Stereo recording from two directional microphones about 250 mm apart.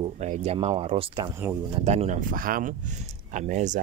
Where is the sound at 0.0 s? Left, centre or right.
Right.